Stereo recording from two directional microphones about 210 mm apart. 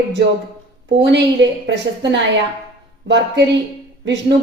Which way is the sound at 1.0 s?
55° right (ahead or behind).